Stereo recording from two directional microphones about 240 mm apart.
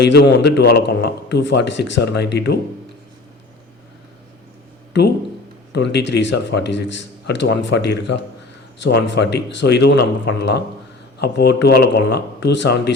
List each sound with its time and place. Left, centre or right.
0.0 s a man's voice: left
5.7 s a man's voice: left